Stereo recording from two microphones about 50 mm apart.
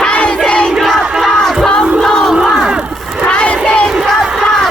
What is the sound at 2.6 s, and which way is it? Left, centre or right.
Crowd, centre.